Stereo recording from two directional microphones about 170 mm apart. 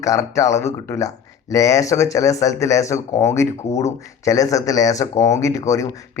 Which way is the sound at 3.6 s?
40° left (ahead or behind).